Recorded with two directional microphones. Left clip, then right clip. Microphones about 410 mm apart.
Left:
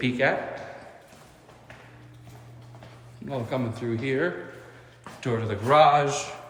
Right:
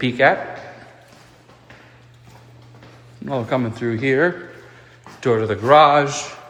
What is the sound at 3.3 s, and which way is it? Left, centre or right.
A man's voice, centre.